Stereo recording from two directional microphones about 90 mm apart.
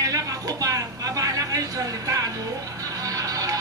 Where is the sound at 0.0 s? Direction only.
40° right (ahead or behind).